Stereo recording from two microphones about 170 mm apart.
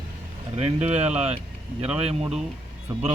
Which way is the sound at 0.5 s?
40° right (ahead or behind).